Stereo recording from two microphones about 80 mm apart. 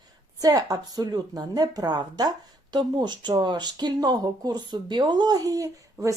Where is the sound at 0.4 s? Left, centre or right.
Right.